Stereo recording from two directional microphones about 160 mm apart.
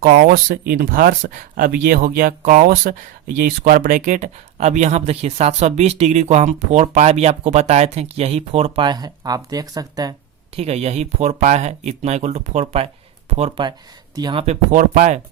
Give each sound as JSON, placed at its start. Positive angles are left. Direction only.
{"t": 0.1, "sound": "speech", "side_deg": -60}
{"t": 10.5, "sound": "speech", "side_deg": -40}
{"t": 14.2, "sound": "speech", "side_deg": -30}
{"t": 14.4, "sound": "speech", "side_deg": -50}